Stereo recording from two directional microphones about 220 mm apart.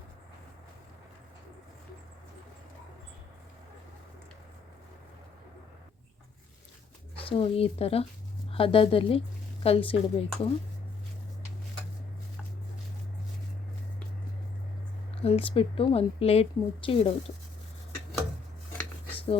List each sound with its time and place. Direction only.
7.3 s a woman's voice: 25° left (ahead or behind)
15.1 s a woman's voice: 25° left (ahead or behind)